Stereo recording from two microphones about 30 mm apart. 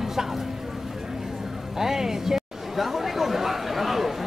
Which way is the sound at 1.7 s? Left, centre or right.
Centre.